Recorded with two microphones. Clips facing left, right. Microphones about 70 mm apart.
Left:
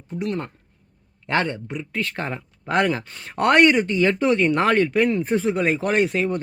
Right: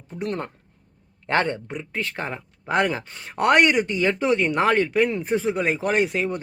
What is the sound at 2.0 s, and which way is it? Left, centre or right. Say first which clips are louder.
Speech: left 2 dB; centre.